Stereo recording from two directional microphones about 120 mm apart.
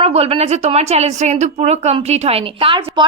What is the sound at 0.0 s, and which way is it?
A woman's voice, 55° right (ahead or behind).